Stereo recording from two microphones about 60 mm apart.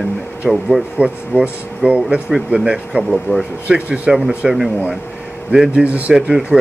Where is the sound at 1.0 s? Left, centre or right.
Right.